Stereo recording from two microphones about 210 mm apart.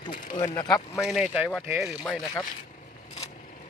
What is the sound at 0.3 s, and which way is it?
Speech, 20° left (ahead or behind).